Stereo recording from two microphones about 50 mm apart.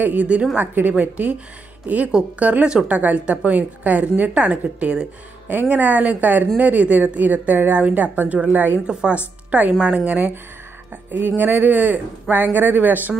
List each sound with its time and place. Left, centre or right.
0.2 s a woman's voice: right
8.7 s a woman's voice: right
9.8 s a woman's voice: centre
10.1 s speech: right